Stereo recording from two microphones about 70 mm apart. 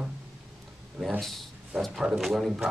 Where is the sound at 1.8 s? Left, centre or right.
Centre.